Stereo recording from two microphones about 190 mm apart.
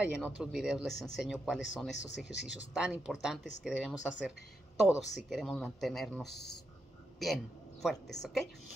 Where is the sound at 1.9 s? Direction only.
65° left (ahead or behind).